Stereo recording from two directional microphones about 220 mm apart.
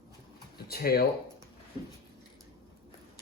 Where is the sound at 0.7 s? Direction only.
45° left (ahead or behind).